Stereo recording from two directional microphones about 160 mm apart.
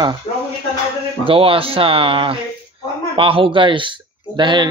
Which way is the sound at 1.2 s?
35° right (ahead or behind).